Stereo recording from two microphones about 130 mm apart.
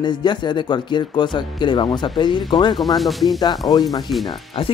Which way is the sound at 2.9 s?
Centre (ahead or behind).